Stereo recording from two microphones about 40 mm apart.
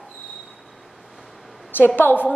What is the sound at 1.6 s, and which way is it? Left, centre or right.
Speech, left.